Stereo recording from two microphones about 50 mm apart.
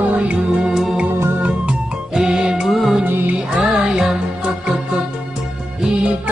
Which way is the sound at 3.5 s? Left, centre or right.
Centre.